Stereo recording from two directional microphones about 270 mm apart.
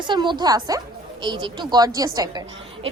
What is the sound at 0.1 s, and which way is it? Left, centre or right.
A woman's voice, centre.